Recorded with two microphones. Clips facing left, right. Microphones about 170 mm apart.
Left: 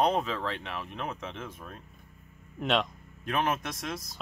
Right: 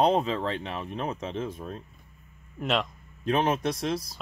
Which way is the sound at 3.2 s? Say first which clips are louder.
Right 5 dB; 30° right (ahead or behind).